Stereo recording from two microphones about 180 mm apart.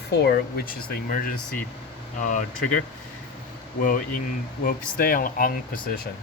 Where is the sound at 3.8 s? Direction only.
50° left (ahead or behind).